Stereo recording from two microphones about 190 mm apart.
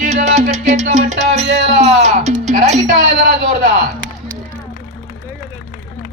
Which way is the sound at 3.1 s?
55° right (ahead or behind).